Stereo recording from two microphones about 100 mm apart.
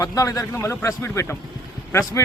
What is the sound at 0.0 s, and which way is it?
Speech, 35° left (ahead or behind).